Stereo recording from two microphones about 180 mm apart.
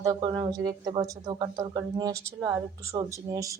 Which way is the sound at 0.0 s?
25° right (ahead or behind).